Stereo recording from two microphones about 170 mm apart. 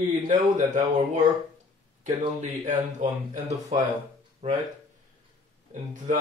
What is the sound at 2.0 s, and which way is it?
Speech, 45° right (ahead or behind).